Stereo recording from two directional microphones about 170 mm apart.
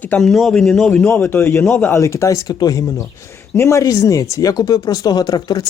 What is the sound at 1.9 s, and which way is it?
Speech, 15° left (ahead or behind).